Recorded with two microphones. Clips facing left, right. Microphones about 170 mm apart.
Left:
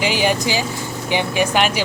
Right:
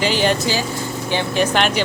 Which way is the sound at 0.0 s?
10° left (ahead or behind).